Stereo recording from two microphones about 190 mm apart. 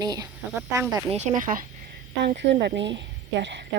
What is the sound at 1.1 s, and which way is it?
Speech, 40° right (ahead or behind).